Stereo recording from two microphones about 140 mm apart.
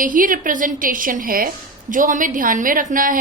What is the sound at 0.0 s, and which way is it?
A woman's voice, 75° right (ahead or behind).